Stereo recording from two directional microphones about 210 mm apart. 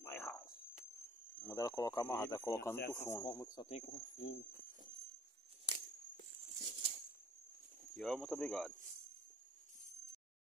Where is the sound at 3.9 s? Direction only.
65° left (ahead or behind).